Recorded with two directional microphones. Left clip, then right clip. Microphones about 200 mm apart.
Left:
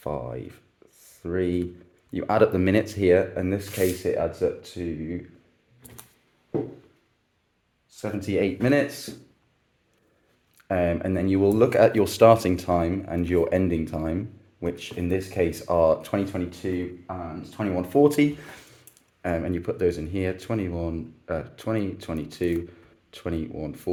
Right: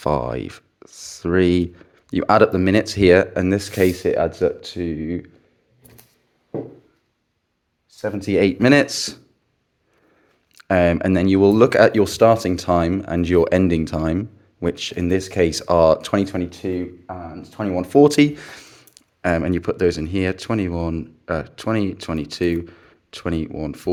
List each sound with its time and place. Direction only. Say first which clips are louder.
0.0 s speech: right 10 dB; 45° right (ahead or behind)
8.0 s speech: right 7 dB; 50° right (ahead or behind)
10.5 s speech: right 8 dB; 45° right (ahead or behind); by 12.6 s 20° right (ahead or behind)
12.6 s speech: right 6 dB; 35° right (ahead or behind)